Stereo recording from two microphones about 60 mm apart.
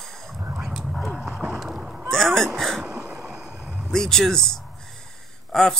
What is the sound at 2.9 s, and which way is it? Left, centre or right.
Cough, right.